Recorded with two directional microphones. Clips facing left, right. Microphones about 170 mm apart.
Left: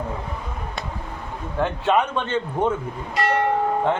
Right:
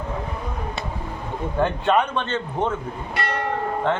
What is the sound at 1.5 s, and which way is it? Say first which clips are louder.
A man's voice: even; centre (ahead or behind).